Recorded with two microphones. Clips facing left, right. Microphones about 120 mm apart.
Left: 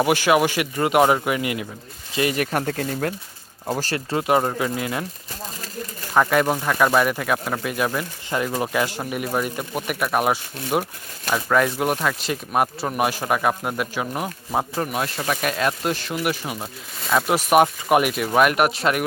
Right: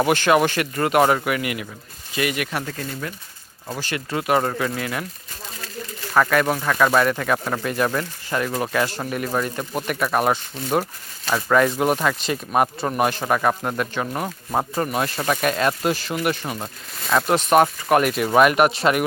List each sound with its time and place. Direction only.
0.0 s speech: 10° left (ahead or behind); by 3.2 s 50° left (ahead or behind)
3.7 s speech: 35° left (ahead or behind)
6.1 s speech: 20° left (ahead or behind)
8.3 s speech: 15° left (ahead or behind)
18.1 s speech: centre (ahead or behind)